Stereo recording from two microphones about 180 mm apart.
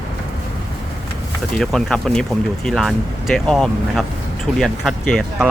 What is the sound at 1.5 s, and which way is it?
Speech, 5° left (ahead or behind).